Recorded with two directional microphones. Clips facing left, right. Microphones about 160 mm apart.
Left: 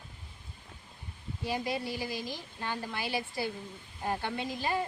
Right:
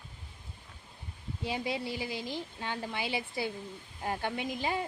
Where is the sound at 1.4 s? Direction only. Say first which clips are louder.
Left 1 dB; 20° right (ahead or behind).